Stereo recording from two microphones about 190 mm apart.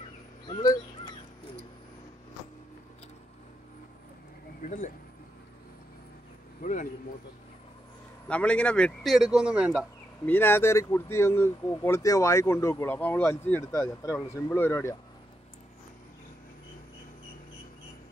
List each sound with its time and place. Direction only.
0.5 s a sound: 20° left (ahead or behind)
4.6 s speech: 40° left (ahead or behind)
6.6 s speech: 45° left (ahead or behind)
8.3 s a man's voice: 5° left (ahead or behind)
10.2 s speech: 10° left (ahead or behind)